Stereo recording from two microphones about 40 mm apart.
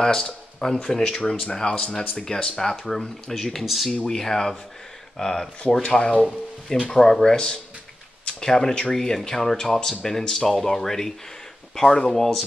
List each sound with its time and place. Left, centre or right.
0.0 s speech: centre
3.6 s speech: centre
3.9 s speech: centre
5.8 s speech: left
6.9 s speech: centre